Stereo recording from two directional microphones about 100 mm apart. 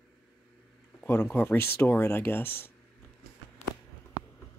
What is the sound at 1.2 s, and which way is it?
Speech, 20° left (ahead or behind).